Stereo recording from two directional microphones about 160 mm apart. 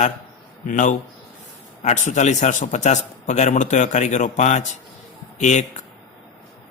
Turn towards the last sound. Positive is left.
turn(degrees=45)  # may be behind; listen again after turning